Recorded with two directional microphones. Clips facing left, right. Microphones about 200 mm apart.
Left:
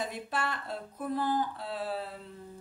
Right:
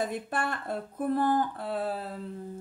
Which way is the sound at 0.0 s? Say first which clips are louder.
Right 4 dB; 50° right (ahead or behind).